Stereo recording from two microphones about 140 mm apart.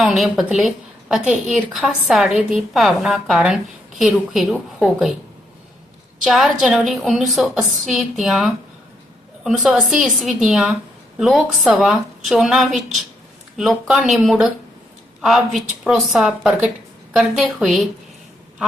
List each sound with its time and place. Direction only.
0.0 s a woman's voice: centre (ahead or behind)
0.5 s a sound: centre (ahead or behind)
1.3 s a woman's voice: 5° right (ahead or behind)
6.2 s a woman's voice: centre (ahead or behind)